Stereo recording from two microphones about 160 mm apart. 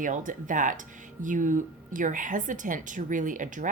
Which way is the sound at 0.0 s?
55° right (ahead or behind).